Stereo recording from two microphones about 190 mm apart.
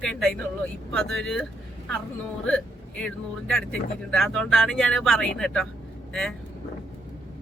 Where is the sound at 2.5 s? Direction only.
5° left (ahead or behind).